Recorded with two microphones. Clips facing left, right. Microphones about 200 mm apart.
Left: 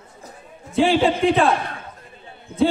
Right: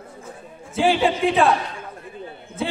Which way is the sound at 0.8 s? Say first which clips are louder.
Left 2 dB; centre (ahead or behind).